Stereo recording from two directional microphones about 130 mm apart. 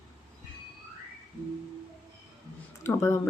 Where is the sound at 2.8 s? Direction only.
20° left (ahead or behind).